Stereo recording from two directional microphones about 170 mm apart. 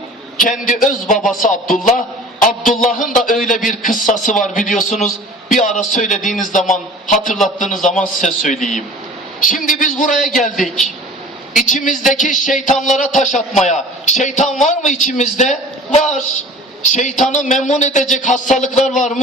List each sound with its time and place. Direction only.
0.3 s a man's voice: 50° left (ahead or behind)
10.6 s a woman's voice: centre (ahead or behind)
11.5 s a man's voice: 50° left (ahead or behind)